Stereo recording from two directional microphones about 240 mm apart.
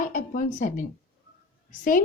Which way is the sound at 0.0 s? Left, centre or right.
Left.